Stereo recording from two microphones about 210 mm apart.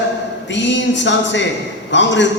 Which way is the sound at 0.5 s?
60° left (ahead or behind).